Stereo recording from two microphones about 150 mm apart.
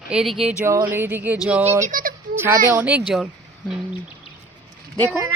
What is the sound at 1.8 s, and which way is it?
Speech, 65° right (ahead or behind).